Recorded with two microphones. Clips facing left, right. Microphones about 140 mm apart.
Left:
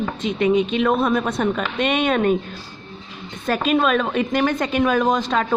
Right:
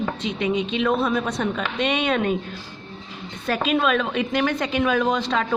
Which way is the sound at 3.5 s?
45° left (ahead or behind).